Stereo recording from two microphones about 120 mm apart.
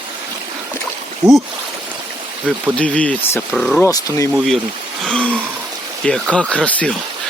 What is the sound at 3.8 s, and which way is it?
Speech, 25° left (ahead or behind).